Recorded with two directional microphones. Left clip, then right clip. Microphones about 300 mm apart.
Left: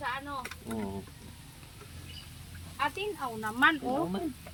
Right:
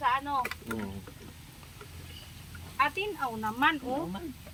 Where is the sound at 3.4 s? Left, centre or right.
Centre.